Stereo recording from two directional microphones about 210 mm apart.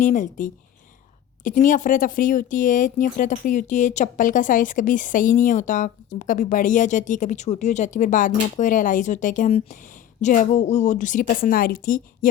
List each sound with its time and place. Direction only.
0.0 s speech: 35° left (ahead or behind)